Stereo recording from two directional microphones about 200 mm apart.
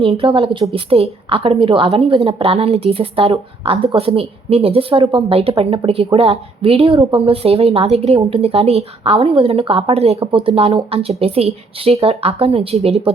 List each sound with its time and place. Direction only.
0.0 s a woman's voice: 30° right (ahead or behind)